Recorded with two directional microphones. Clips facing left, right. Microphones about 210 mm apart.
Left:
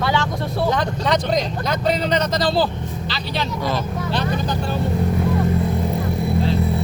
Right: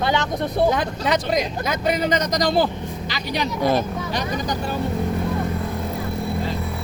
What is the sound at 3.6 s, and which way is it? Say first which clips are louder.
Speech: right 6 dB; 50° right (ahead or behind).